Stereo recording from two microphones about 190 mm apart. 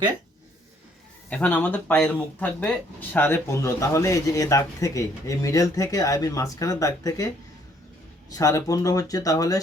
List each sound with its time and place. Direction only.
1.3 s speech: 10° left (ahead or behind)
8.3 s speech: 20° left (ahead or behind)